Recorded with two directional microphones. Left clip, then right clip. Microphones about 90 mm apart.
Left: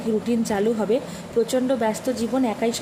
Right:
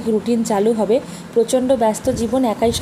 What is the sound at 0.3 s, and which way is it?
Speech, 35° right (ahead or behind).